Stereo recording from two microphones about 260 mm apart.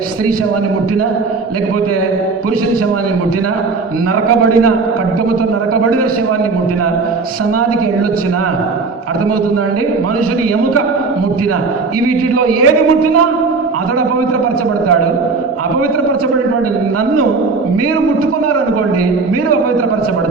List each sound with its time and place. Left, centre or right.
4.3 s a man's voice: right
12.4 s a man's voice: right